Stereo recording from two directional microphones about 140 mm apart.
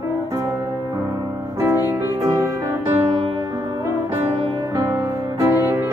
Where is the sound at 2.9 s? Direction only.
40° right (ahead or behind).